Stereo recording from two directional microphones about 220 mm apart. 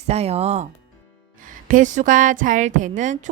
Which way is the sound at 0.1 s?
30° right (ahead or behind).